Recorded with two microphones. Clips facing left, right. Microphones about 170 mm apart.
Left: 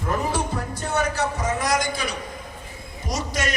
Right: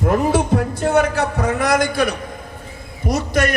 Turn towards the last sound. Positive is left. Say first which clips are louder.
# right 8 dB
turn(degrees=-60)  # may be behind; listen again after turning